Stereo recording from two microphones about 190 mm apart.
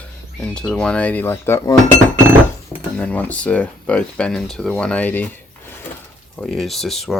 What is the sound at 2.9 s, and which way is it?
Speech, 10° left (ahead or behind).